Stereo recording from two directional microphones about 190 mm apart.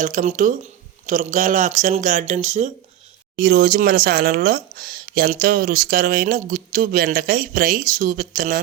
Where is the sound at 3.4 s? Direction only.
50° right (ahead or behind).